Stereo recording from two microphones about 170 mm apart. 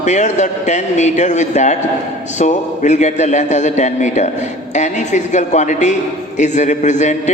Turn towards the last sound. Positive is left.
turn(degrees=45)  # may be behind; listen again after turning